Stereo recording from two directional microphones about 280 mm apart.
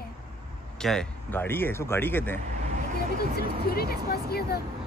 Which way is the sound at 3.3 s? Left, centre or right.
Left.